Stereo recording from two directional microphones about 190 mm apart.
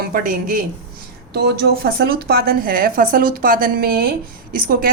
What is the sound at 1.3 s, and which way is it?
A woman's voice, 60° right (ahead or behind).